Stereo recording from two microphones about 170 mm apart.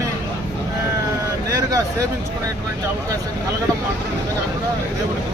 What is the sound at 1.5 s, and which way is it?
Speech, 20° right (ahead or behind).